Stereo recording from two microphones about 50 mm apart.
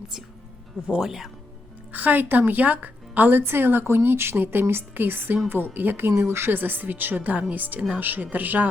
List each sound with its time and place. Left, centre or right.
0.9 s speech: centre
1.9 s a woman's voice: right